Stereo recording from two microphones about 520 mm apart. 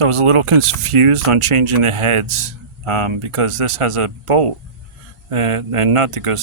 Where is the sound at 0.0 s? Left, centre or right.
Right.